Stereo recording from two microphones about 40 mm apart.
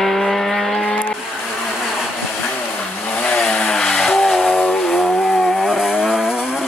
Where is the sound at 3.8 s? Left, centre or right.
Centre.